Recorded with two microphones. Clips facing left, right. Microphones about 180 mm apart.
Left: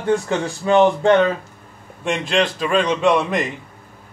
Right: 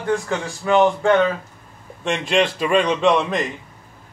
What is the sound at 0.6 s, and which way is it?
Speech, 20° left (ahead or behind).